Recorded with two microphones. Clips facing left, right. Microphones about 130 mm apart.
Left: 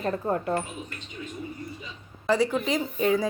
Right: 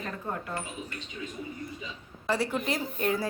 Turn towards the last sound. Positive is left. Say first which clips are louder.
# left 5 dB
turn(degrees=0)  # may be behind; listen again after turning